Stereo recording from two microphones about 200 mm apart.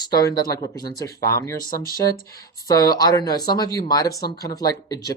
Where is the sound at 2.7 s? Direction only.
20° left (ahead or behind).